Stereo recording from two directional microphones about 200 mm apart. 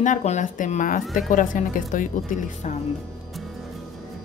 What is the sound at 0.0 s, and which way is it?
A woman's voice, 35° left (ahead or behind).